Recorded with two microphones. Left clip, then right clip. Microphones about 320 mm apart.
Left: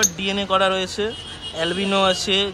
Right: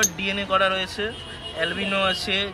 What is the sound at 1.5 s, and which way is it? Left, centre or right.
Speech, left.